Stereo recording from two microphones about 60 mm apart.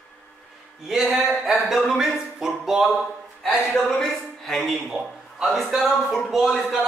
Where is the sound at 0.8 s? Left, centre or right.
Centre.